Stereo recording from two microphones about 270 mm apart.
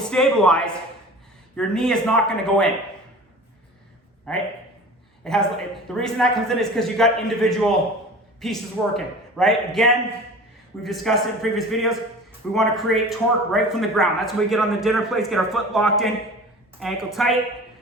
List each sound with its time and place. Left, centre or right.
0.1 s a man's voice: centre
4.3 s a man's voice: centre